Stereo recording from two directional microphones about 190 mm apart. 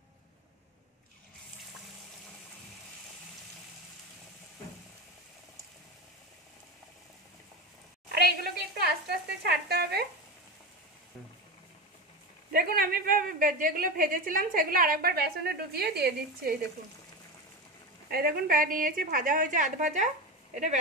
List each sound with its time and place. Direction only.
8.1 s a sound: 55° right (ahead or behind)
12.5 s a woman's voice: 50° right (ahead or behind)
18.1 s a woman's voice: 55° right (ahead or behind)